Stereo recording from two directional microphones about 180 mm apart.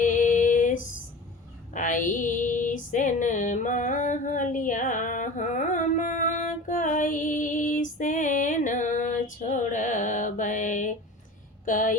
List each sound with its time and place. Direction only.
0.0 s female singing: 45° left (ahead or behind)
11.6 s speech: 45° left (ahead or behind)